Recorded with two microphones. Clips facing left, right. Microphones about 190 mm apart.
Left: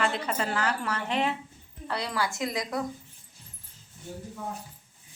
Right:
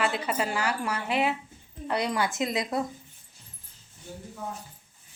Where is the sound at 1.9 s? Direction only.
20° right (ahead or behind).